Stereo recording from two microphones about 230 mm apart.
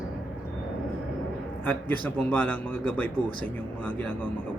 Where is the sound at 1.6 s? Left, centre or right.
Centre.